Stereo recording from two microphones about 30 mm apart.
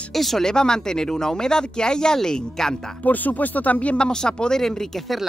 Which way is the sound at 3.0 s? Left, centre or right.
Left.